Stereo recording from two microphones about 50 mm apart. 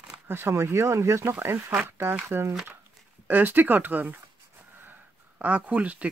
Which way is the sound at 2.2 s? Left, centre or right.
Right.